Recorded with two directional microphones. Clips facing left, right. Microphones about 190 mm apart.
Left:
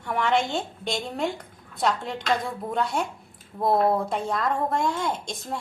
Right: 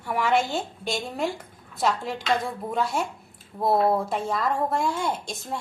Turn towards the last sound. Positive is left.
turn(degrees=-5)  # may be behind; listen again after turning